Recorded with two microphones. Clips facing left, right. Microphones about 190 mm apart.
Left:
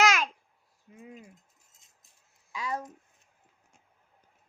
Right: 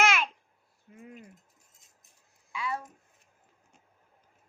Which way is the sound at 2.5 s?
40° left (ahead or behind).